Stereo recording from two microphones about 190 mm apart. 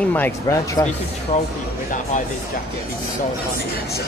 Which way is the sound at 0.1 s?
15° left (ahead or behind).